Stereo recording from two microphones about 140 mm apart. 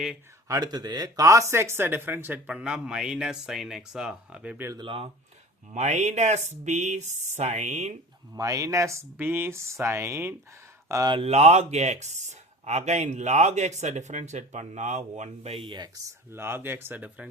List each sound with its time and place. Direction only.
0.4 s speech: 25° right (ahead or behind)
4.8 s speech: 35° right (ahead or behind)
5.7 s speech: 55° right (ahead or behind)
8.3 s speech: 25° right (ahead or behind)
11.1 s speech: 45° right (ahead or behind)
15.5 s speech: 35° right (ahead or behind)
16.0 s speech: 15° right (ahead or behind)